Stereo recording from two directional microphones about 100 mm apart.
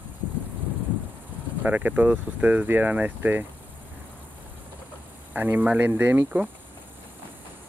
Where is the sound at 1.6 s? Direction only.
15° right (ahead or behind).